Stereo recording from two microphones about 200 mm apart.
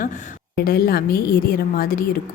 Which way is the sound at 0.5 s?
50° left (ahead or behind).